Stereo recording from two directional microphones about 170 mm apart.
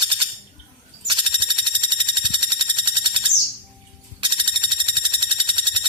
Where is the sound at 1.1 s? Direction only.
30° right (ahead or behind).